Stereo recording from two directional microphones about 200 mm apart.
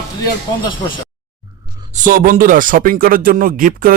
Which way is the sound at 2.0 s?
45° right (ahead or behind).